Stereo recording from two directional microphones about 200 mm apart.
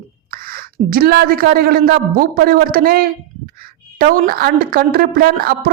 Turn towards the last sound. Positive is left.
turn(degrees=-50)  # may be behind; listen again after turning